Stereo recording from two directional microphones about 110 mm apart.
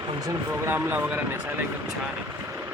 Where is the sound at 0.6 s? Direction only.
20° right (ahead or behind).